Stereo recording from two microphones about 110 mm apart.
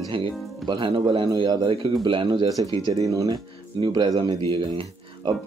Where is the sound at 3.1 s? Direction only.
30° right (ahead or behind).